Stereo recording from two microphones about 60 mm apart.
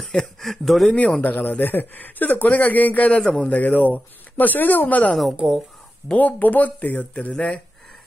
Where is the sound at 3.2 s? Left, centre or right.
Centre.